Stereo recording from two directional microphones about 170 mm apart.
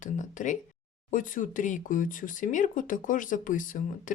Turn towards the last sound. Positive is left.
turn(degrees=50)  # may be behind; listen again after turning